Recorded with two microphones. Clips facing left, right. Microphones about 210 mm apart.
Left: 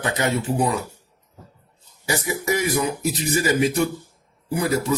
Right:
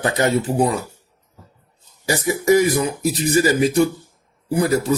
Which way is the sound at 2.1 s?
40° right (ahead or behind).